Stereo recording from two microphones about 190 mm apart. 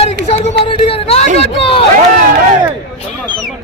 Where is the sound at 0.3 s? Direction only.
30° left (ahead or behind).